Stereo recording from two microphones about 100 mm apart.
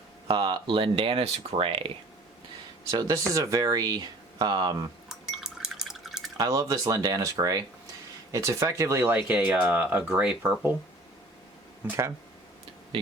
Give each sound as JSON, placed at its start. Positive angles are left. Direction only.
{"t": 0.3, "sound": "speech", "side_deg": -50}
{"t": 2.9, "sound": "speech", "side_deg": -40}
{"t": 5.0, "sound": "liquid", "side_deg": -5}
{"t": 6.3, "sound": "speech", "side_deg": -35}
{"t": 11.9, "sound": "speech", "side_deg": -30}